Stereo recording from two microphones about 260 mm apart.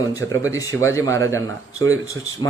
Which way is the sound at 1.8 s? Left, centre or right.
Right.